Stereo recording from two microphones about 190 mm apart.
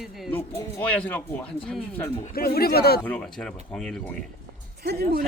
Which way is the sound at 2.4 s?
55° left (ahead or behind).